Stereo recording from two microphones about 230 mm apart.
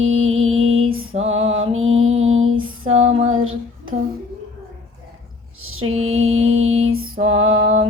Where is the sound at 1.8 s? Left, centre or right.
Right.